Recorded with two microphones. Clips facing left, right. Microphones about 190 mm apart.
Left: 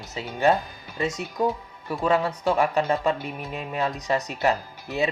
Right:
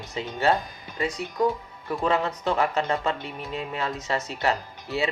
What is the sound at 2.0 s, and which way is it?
Speech, 10° left (ahead or behind).